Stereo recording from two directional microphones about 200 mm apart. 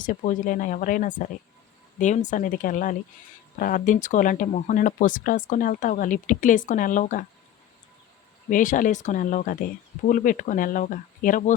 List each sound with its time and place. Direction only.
0.0 s speech: 40° left (ahead or behind)
8.4 s speech: 40° left (ahead or behind)